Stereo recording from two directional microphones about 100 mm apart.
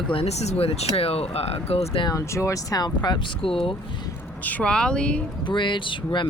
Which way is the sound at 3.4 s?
65° left (ahead or behind).